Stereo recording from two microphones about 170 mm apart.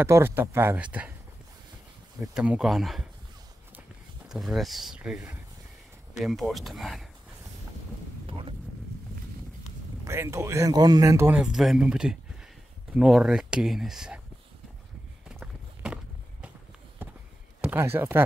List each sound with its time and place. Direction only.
0.0 s speech: 15° right (ahead or behind)
2.1 s speech: 5° right (ahead or behind)
4.3 s speech: centre (ahead or behind)
10.0 s speech: 15° right (ahead or behind)
15.2 s clip-clop: 5° right (ahead or behind)
17.0 s a sound: 10° right (ahead or behind)
17.6 s speech: 10° right (ahead or behind)